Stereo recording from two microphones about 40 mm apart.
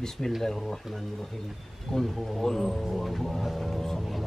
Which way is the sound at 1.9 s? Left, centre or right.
Centre.